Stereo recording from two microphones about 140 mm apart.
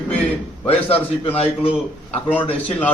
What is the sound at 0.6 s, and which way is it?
Speech, 45° left (ahead or behind).